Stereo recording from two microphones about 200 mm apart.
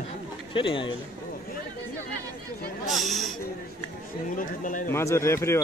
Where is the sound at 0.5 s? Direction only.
25° left (ahead or behind).